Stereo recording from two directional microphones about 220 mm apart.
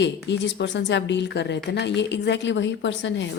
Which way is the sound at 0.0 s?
55° left (ahead or behind).